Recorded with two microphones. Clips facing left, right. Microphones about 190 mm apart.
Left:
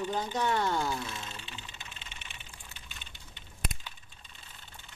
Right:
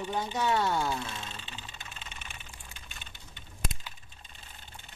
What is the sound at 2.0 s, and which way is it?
Vehicle, 45° right (ahead or behind).